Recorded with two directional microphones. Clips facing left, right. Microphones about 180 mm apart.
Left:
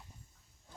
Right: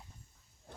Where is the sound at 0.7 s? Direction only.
65° right (ahead or behind).